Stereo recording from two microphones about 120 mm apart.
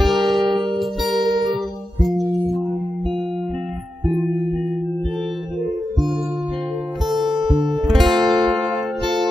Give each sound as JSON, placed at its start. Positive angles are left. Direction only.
{"t": 0.0, "sound": "music", "side_deg": 0}
{"t": 7.1, "sound": "music", "side_deg": 0}
{"t": 9.0, "sound": "music", "side_deg": -40}